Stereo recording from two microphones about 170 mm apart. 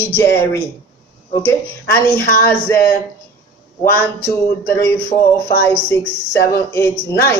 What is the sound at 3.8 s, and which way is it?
Speech, 10° left (ahead or behind).